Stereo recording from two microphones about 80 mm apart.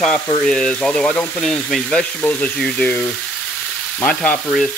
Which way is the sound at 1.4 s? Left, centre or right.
Centre.